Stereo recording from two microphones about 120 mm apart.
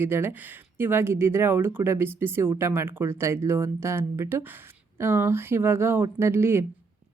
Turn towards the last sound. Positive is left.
turn(degrees=-20)  # may be behind; listen again after turning